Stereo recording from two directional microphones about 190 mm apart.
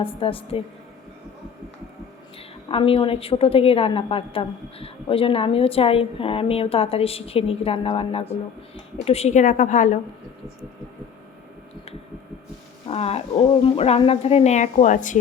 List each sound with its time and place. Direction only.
0.0 s a woman's voice: 30° left (ahead or behind)
2.6 s a woman's voice: 30° left (ahead or behind)
12.9 s speech: 30° left (ahead or behind)